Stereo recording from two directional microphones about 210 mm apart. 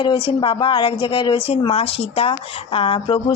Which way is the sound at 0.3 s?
25° left (ahead or behind).